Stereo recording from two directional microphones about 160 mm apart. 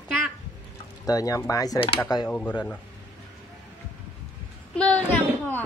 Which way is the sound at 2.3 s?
10° left (ahead or behind).